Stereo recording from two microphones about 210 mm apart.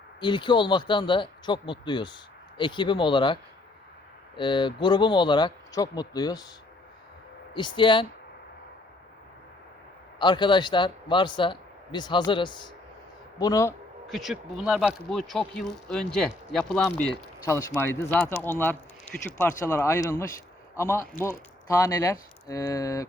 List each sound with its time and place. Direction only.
0.2 s speech: 20° left (ahead or behind)
4.4 s speech: 20° left (ahead or behind)
7.5 s speech: 20° left (ahead or behind)
10.2 s a man's voice: 20° left (ahead or behind)
14.1 s speech: centre (ahead or behind)
17.4 s a man's voice: 15° left (ahead or behind)